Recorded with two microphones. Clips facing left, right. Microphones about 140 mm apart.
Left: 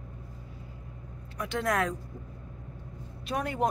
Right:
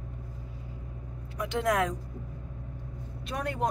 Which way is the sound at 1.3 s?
15° right (ahead or behind).